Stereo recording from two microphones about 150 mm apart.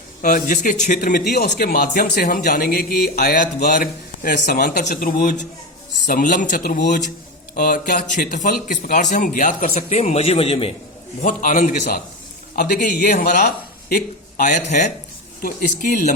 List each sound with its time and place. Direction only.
0.2 s speech: 70° left (ahead or behind)
7.5 s speech: 70° left (ahead or behind); by 10.7 s 40° left (ahead or behind)
11.2 s speech: 60° left (ahead or behind)
12.5 s speech: 90° left; by 14.9 s 55° left (ahead or behind)
15.4 s speech: 70° left (ahead or behind)